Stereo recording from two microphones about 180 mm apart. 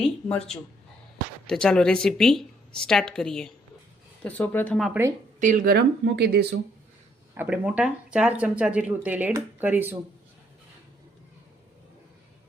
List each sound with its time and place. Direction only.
0.0 s speech: 5° left (ahead or behind)
5.4 s speech: 45° right (ahead or behind); by 6.6 s 70° right (ahead or behind)
7.3 s speech: 5° right (ahead or behind)